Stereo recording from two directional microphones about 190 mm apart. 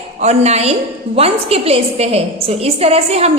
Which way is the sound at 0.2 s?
35° right (ahead or behind).